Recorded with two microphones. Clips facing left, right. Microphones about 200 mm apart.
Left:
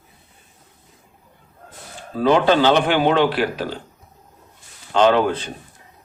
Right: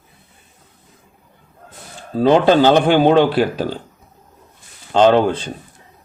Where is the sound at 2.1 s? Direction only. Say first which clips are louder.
Right 4 dB; 30° right (ahead or behind).